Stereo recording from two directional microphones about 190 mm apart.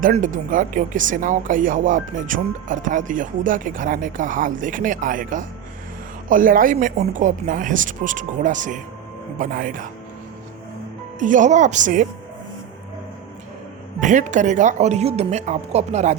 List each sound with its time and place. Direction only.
0.0 s speech: 45° right (ahead or behind)
11.2 s speech: 40° right (ahead or behind)
14.0 s speech: 40° right (ahead or behind)